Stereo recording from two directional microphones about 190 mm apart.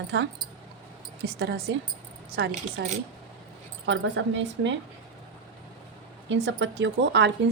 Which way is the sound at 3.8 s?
75° right (ahead or behind).